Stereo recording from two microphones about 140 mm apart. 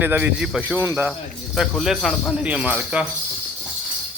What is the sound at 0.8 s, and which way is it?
Speech, 15° right (ahead or behind).